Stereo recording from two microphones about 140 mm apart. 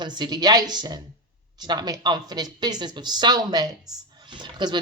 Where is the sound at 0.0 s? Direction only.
30° right (ahead or behind).